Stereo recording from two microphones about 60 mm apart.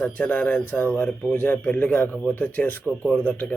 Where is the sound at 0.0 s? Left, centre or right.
Left.